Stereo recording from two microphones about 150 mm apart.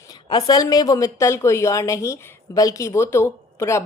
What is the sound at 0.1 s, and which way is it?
A woman's voice, 25° left (ahead or behind).